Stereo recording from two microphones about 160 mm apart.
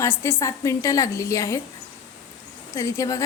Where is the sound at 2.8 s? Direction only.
20° left (ahead or behind).